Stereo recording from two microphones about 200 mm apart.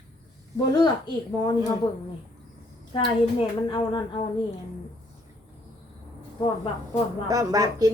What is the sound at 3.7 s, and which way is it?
Speech, 25° left (ahead or behind).